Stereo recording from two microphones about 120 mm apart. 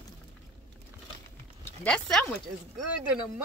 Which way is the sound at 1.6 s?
10° left (ahead or behind).